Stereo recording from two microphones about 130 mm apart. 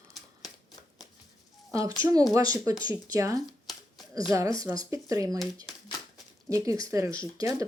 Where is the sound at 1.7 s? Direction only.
25° right (ahead or behind).